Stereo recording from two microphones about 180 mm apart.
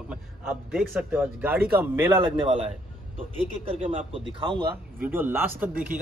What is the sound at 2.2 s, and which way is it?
Speech, 30° right (ahead or behind).